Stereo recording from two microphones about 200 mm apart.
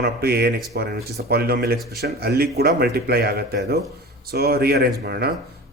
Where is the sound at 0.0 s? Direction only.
50° right (ahead or behind).